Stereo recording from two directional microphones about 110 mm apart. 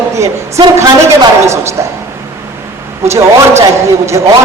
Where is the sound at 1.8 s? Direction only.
25° right (ahead or behind).